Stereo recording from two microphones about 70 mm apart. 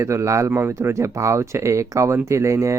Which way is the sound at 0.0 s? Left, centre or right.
Right.